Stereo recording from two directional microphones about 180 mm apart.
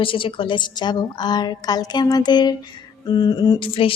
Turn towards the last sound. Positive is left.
turn(degrees=30)  # may be behind; listen again after turning